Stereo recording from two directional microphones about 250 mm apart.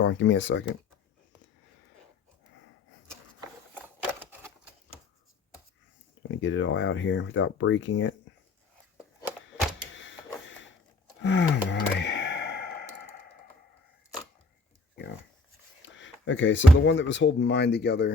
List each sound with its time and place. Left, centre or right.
0.0 s speech: left
4.2 s typewriter: centre
6.3 s speech: left
9.0 s a sound: centre
9.9 s power windows: left
11.2 s a sound: left
15.8 s speech: left